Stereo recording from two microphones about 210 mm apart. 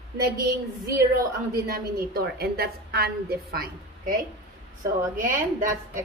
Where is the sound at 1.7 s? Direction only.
45° right (ahead or behind).